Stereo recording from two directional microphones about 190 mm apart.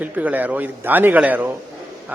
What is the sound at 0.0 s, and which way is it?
A man's voice, 10° right (ahead or behind).